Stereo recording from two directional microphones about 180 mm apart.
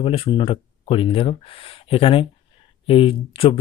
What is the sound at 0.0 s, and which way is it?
Speech, 30° left (ahead or behind).